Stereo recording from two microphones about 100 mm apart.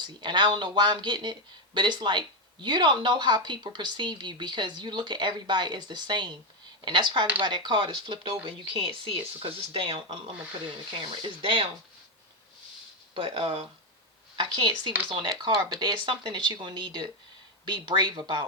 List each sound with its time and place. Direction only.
0.0 s speech: 50° right (ahead or behind); by 10.3 s 75° right (ahead or behind)
10.9 s speech: 50° right (ahead or behind)
13.1 s speech: 65° right (ahead or behind)
14.3 s speech: 55° right (ahead or behind)